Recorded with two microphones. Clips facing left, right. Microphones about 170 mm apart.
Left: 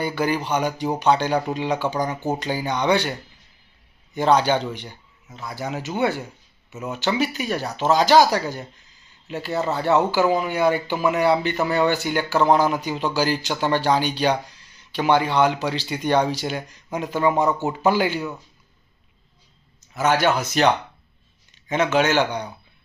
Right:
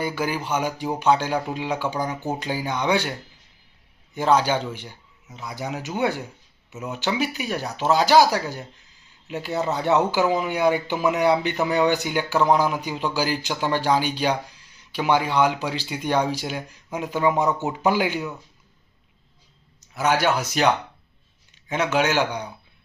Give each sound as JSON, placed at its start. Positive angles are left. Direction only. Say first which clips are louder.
{"t": 0.0, "sound": "speech", "louder": "left 3 dB", "side_deg": -5}
{"t": 4.1, "sound": "speech", "louder": "left 2 dB", "side_deg": -5}
{"t": 6.7, "sound": "speech", "louder": "left 2 dB", "side_deg": 0}
{"t": 6.9, "sound": "speech", "louder": "left 2 dB", "side_deg": -10}
{"t": 19.9, "sound": "speech", "louder": "left 2 dB", "side_deg": -10}